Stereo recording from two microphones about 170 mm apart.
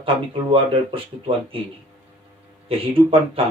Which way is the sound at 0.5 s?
30° right (ahead or behind).